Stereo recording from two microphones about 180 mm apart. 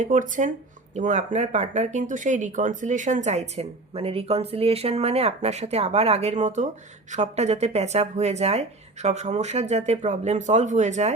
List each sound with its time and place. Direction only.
0.0 s speech: 45° right (ahead or behind)